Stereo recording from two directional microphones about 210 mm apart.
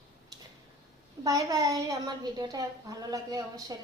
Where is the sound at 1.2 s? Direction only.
15° right (ahead or behind).